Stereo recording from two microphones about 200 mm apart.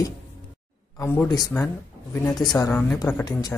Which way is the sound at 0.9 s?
15° left (ahead or behind).